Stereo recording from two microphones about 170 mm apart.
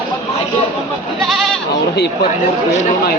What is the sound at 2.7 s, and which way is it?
Speech, 40° left (ahead or behind).